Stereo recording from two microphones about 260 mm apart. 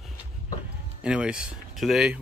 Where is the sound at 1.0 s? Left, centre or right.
Centre.